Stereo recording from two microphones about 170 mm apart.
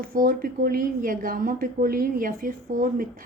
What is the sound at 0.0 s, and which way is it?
A woman's voice, 55° right (ahead or behind).